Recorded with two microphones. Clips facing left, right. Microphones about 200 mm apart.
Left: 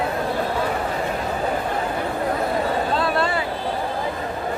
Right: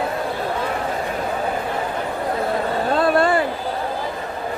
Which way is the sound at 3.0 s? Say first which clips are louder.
Right 5 dB; 50° right (ahead or behind).